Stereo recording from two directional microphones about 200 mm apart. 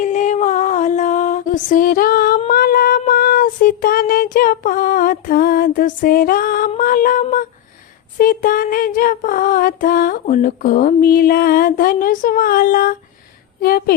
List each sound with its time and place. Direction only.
0.0 s music: 40° left (ahead or behind)
2.5 s child singing: 50° left (ahead or behind)
8.2 s a sound: 45° left (ahead or behind)